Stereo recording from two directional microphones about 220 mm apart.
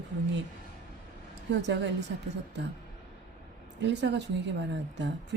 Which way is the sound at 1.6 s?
55° right (ahead or behind).